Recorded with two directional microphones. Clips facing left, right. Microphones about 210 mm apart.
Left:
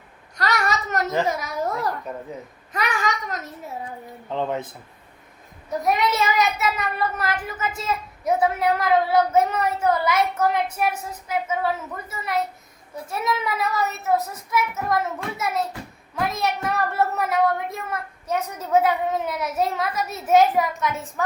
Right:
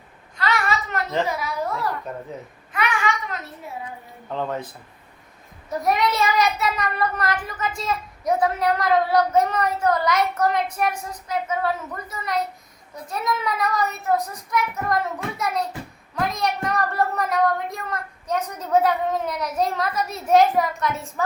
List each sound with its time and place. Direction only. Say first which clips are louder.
0.3 s a sound: even; 40° left (ahead or behind)
2.7 s babbling: right 1 dB; 40° left (ahead or behind)
4.3 s speech: left 1 dB; 15° left (ahead or behind)
5.8 s speech: right 1 dB; centre (ahead or behind)
13.1 s speech: even; 5° left (ahead or behind)